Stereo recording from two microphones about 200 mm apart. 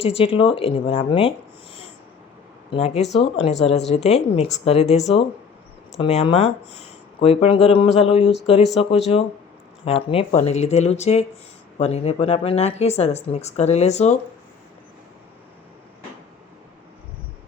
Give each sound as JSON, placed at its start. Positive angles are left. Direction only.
{"t": 0.0, "sound": "speech", "side_deg": 30}
{"t": 2.6, "sound": "speech", "side_deg": 35}